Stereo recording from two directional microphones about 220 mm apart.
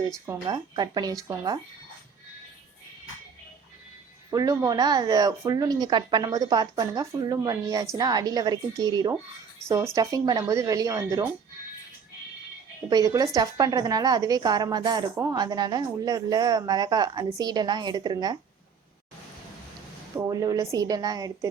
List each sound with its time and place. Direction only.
0.4 s a woman's voice: 20° right (ahead or behind)
4.3 s a woman's voice: 15° right (ahead or behind)
12.9 s a woman's voice: 15° right (ahead or behind)
20.1 s a woman's voice: 15° right (ahead or behind)